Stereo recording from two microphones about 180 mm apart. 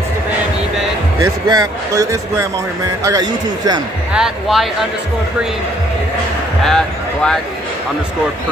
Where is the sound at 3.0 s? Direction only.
20° right (ahead or behind).